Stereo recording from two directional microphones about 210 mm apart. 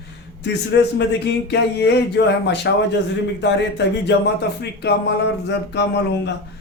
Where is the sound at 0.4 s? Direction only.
55° left (ahead or behind).